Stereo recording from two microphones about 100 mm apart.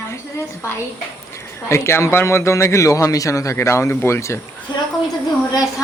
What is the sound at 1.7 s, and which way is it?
A man's voice, 25° left (ahead or behind).